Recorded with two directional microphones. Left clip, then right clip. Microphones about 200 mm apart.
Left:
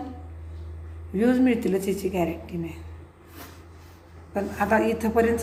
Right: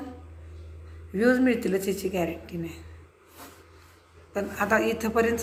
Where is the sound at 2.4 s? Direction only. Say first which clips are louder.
Left 2 dB; 50° right (ahead or behind).